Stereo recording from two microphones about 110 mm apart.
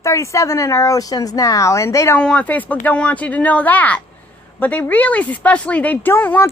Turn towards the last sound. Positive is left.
turn(degrees=15)  # may be behind; listen again after turning